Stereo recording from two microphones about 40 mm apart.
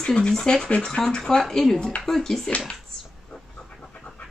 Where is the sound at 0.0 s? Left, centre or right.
Centre.